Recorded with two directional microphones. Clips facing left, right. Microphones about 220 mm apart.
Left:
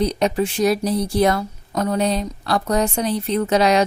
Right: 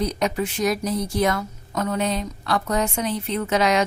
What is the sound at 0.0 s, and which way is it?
A woman's voice, 30° left (ahead or behind).